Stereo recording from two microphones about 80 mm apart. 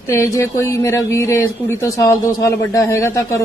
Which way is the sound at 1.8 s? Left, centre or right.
Left.